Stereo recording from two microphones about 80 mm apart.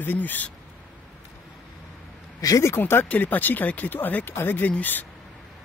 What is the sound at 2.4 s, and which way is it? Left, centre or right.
Speech, left.